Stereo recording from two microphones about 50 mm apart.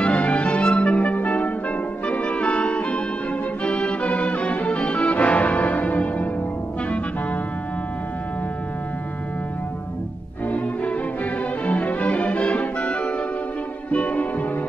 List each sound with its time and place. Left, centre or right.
0.0 s music: left
10.5 s music: left